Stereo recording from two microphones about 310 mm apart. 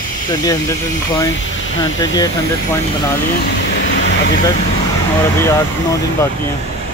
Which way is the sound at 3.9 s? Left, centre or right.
Left.